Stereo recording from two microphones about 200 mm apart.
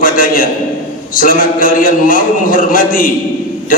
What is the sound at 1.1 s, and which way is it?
A man's voice, 45° left (ahead or behind).